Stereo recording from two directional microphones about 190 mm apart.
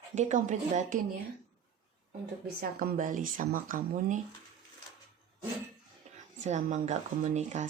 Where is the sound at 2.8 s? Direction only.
50° right (ahead or behind).